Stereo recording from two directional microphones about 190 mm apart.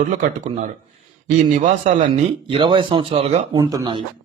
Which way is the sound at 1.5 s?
40° right (ahead or behind).